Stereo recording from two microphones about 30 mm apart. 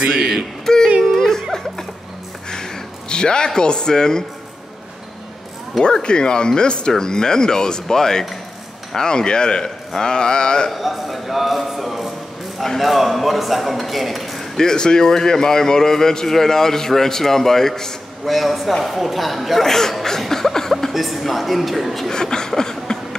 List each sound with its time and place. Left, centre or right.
0.7 s a sound: centre
1.0 s music: centre
2.5 s a sound: left
6.0 s speech: left
9.0 s speech: left
10.8 s speech: centre
14.6 s a man's voice: left
18.2 s speech: centre
19.6 s laughter: centre
20.9 s speech: centre
22.1 s chuckle: left